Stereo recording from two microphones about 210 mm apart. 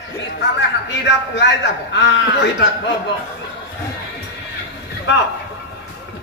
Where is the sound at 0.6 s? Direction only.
60° left (ahead or behind).